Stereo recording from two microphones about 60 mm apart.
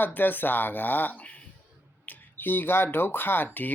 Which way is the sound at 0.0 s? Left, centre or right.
Left.